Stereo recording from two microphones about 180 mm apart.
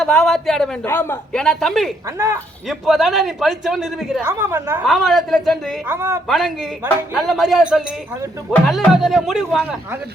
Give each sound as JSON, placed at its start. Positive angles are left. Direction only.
{"t": 0.0, "sound": "a man's voice", "side_deg": 0}
{"t": 2.1, "sound": "a woman's voice", "side_deg": -15}
{"t": 2.6, "sound": "a man's voice", "side_deg": 0}
{"t": 4.3, "sound": "a woman's voice", "side_deg": -15}
{"t": 4.9, "sound": "a man's voice", "side_deg": 0}
{"t": 5.9, "sound": "a woman's voice", "side_deg": -15}
{"t": 6.2, "sound": "a man's voice", "side_deg": 0}